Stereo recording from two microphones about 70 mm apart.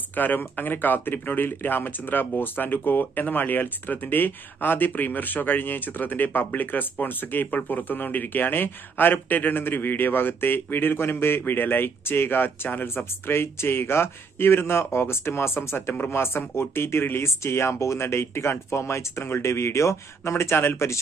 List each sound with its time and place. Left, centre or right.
0.1 s speech: left